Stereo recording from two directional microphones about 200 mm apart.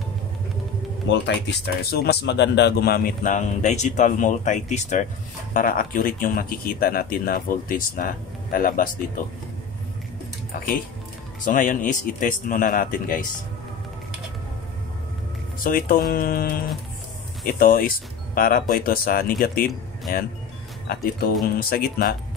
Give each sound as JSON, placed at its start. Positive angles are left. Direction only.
{"t": 1.0, "sound": "a man's voice", "side_deg": 60}
{"t": 11.4, "sound": "a man's voice", "side_deg": 40}
{"t": 15.6, "sound": "speech", "side_deg": 45}